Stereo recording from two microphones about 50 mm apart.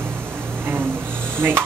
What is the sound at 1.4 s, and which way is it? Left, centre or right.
Speech, right.